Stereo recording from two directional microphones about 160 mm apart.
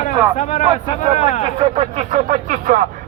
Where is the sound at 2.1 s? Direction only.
55° right (ahead or behind).